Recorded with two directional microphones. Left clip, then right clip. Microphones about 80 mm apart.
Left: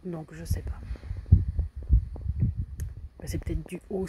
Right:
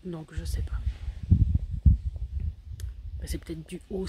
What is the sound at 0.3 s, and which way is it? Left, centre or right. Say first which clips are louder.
Speech: left 2 dB; centre.